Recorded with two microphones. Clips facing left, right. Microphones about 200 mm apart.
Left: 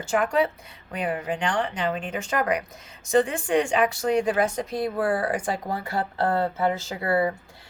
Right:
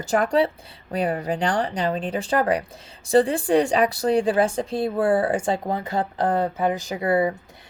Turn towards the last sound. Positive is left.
turn(degrees=-20)  # may be behind; listen again after turning